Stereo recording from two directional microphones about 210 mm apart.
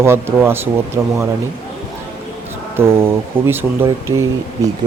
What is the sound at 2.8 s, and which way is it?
Speech, 10° right (ahead or behind).